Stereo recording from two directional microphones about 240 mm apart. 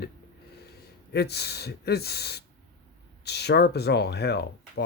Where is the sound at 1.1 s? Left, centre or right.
Left.